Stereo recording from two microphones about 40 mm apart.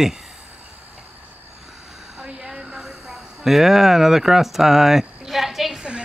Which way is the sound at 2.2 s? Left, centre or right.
Centre.